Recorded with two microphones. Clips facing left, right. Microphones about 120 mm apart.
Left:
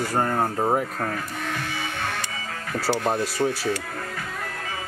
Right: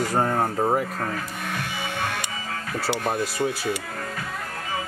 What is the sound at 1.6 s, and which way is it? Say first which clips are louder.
Music: right 1 dB; 15° right (ahead or behind).